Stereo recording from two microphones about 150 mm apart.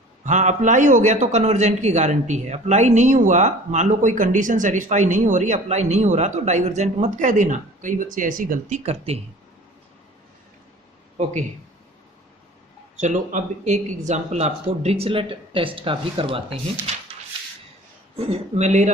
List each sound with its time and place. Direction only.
0.3 s a man's voice: 55° right (ahead or behind)
8.8 s a man's voice: 45° right (ahead or behind)
13.0 s speech: 55° right (ahead or behind); by 16.9 s 40° right (ahead or behind)
18.3 s a man's voice: 45° right (ahead or behind)